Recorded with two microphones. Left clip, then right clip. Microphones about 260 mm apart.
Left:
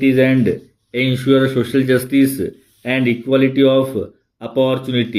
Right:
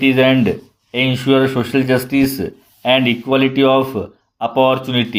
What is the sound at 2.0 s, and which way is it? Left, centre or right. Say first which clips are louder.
Speech: left 1 dB; centre.